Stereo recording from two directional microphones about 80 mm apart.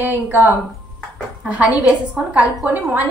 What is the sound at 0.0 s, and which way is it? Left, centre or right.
Speech, right.